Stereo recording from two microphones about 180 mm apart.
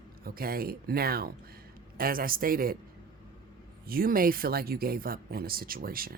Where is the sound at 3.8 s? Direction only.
55° right (ahead or behind).